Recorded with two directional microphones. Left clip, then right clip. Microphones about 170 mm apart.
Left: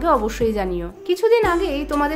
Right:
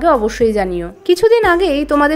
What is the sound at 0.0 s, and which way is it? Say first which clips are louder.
Speech: right 6 dB; 25° right (ahead or behind).